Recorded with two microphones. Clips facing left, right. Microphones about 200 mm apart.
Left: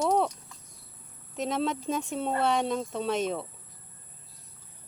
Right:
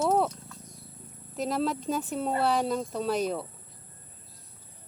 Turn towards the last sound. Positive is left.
turn(degrees=0)  # may be behind; listen again after turning